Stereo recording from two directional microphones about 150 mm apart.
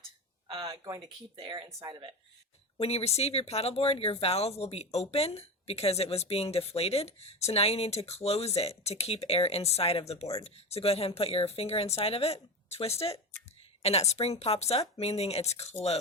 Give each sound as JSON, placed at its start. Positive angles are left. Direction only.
{"t": 0.6, "sound": "speech", "side_deg": -20}
{"t": 2.7, "sound": "speech", "side_deg": 40}